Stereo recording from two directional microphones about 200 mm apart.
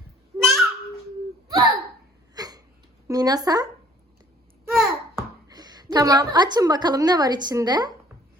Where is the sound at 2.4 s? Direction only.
20° right (ahead or behind).